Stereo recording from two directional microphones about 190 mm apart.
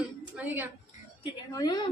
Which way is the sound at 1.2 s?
20° left (ahead or behind).